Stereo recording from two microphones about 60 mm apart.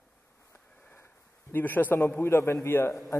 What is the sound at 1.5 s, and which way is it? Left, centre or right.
A man's voice, left.